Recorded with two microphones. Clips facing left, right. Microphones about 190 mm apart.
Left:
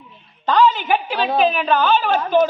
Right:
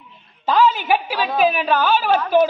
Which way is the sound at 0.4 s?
10° right (ahead or behind).